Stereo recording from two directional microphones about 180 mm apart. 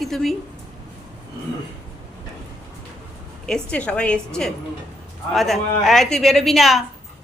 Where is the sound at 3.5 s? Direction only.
5° left (ahead or behind).